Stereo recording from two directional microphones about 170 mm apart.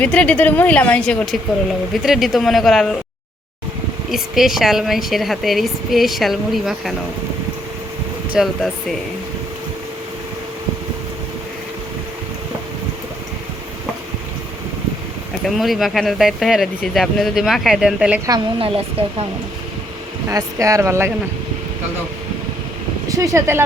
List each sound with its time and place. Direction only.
0.0 s a woman's voice: 10° left (ahead or behind)
4.1 s a woman's voice: centre (ahead or behind)
8.4 s a woman's voice: centre (ahead or behind)
15.4 s a woman's voice: centre (ahead or behind)
18.3 s a woman's voice: 30° right (ahead or behind)
20.3 s a woman's voice: 20° right (ahead or behind)
23.0 s speech: 20° right (ahead or behind)